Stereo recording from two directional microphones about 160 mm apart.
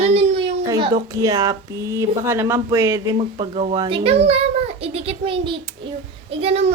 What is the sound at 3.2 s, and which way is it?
A child's voice, 35° right (ahead or behind).